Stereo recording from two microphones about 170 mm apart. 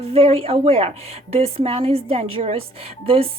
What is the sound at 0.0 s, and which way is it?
Speech, 35° right (ahead or behind).